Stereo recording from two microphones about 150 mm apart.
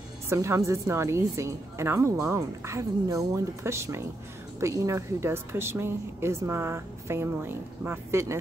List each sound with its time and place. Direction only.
0.3 s a woman's voice: 20° right (ahead or behind)